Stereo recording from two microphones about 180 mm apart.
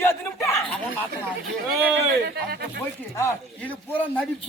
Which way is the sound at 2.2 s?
65° right (ahead or behind).